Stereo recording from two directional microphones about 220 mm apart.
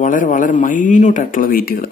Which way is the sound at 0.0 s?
35° left (ahead or behind).